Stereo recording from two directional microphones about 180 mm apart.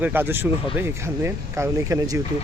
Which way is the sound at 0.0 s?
10° right (ahead or behind).